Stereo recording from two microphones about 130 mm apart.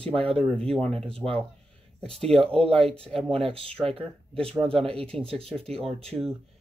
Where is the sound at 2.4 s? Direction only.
50° right (ahead or behind).